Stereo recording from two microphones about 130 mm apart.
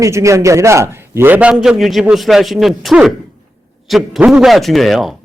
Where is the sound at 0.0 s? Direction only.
25° right (ahead or behind).